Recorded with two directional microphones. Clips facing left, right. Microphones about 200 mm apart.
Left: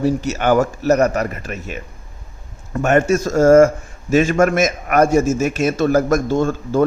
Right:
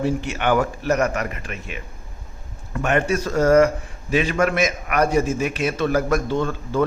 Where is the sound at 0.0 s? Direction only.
40° left (ahead or behind).